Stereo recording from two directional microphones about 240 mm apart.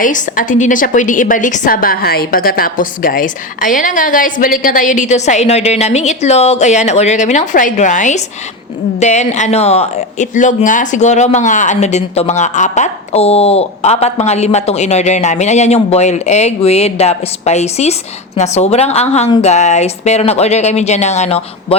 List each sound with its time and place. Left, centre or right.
0.0 s a woman's voice: left